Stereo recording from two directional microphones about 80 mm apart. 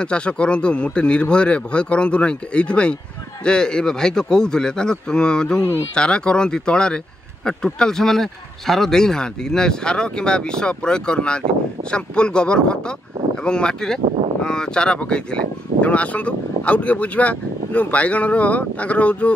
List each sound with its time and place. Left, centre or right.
0.0 s speech: centre